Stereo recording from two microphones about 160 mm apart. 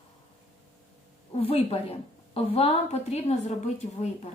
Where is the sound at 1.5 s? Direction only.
40° left (ahead or behind).